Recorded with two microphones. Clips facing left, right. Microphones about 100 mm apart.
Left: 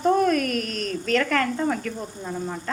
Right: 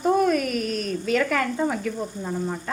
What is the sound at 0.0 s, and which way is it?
Speech, 5° right (ahead or behind).